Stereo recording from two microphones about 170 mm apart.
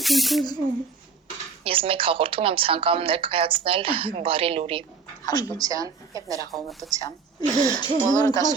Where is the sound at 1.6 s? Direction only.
35° right (ahead or behind).